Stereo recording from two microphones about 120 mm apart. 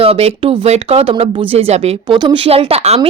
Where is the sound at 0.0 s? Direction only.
55° right (ahead or behind).